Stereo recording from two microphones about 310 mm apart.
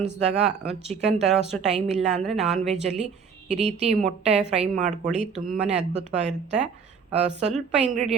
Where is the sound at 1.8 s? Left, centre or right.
Right.